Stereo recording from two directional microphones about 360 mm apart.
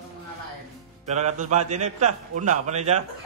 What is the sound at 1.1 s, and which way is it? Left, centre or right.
A man's voice, centre.